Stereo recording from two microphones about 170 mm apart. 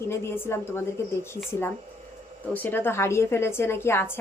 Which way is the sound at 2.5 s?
10° left (ahead or behind).